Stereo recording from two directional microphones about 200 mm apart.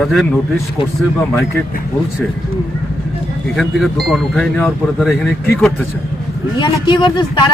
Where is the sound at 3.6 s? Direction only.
Centre (ahead or behind).